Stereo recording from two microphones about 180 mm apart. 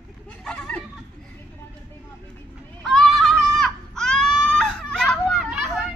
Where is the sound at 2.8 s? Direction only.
Centre (ahead or behind).